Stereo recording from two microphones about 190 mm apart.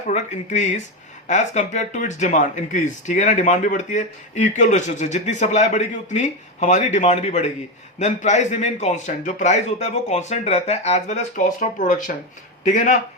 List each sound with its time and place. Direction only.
0.1 s speech: 40° left (ahead or behind)